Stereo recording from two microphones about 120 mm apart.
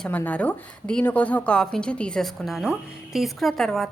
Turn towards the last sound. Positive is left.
turn(degrees=5)  # may be behind; listen again after turning